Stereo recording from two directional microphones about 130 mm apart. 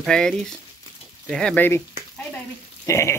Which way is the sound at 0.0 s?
5° left (ahead or behind).